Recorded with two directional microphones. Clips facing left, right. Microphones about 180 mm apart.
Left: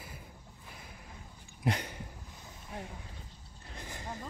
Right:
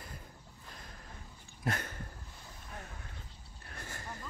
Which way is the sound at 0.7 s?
10° left (ahead or behind).